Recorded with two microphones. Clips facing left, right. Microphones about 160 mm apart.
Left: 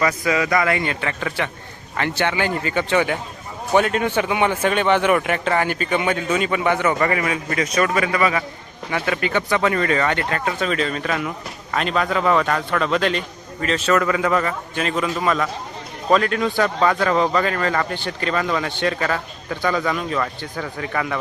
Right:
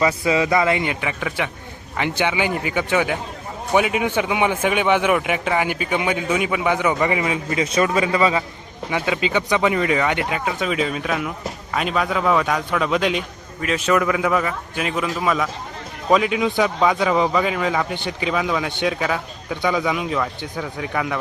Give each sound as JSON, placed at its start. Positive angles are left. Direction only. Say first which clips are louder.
{"t": 0.3, "sound": "a man's voice", "louder": "right 1 dB", "side_deg": -25}